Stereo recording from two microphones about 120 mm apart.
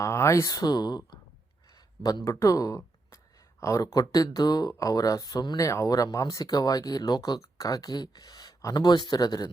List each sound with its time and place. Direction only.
0.0 s speech: 25° left (ahead or behind)